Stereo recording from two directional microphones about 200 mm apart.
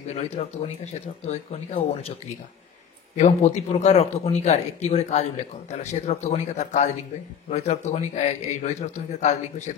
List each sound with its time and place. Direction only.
0.1 s speech: 30° left (ahead or behind)
3.2 s speech: 35° left (ahead or behind)